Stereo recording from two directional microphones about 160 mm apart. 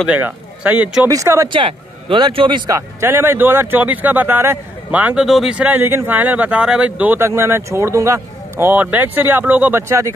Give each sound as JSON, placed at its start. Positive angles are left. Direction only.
{"t": 0.0, "sound": "speech", "side_deg": -10}
{"t": 1.5, "sound": "speech", "side_deg": -30}
{"t": 3.0, "sound": "speech", "side_deg": -15}